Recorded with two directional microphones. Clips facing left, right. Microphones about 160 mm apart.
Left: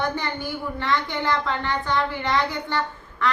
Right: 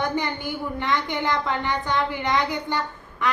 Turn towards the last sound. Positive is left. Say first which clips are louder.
# left 2 dB
turn(degrees=-15)  # may be behind; listen again after turning